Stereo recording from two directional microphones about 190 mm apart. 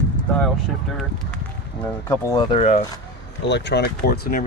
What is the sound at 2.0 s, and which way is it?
Speech, 20° left (ahead or behind).